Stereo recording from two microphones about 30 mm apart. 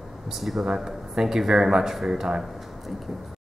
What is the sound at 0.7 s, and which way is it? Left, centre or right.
A man's voice, centre.